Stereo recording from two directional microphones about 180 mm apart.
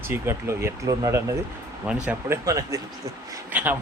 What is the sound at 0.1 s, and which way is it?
Speech, 15° right (ahead or behind).